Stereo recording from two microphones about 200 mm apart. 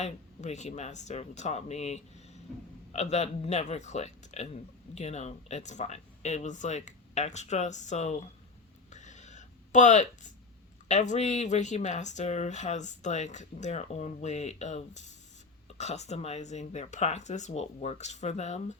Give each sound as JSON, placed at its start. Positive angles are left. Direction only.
{"t": 0.0, "sound": "speech", "side_deg": 35}
{"t": 8.9, "sound": "a sound", "side_deg": 35}
{"t": 10.8, "sound": "speech", "side_deg": 35}